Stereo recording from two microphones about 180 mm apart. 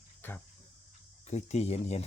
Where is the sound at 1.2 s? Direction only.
35° left (ahead or behind).